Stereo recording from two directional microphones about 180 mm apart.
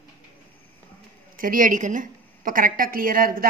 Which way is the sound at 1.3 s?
50° right (ahead or behind).